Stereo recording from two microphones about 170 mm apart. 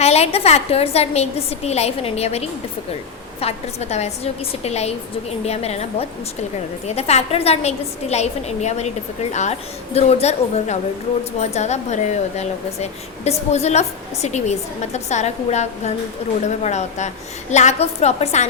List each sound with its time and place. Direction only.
0.0 s speech: 40° left (ahead or behind)